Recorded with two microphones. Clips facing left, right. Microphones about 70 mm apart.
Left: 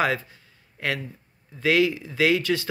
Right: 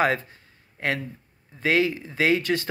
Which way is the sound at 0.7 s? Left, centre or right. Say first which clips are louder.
Right 1 dB; right.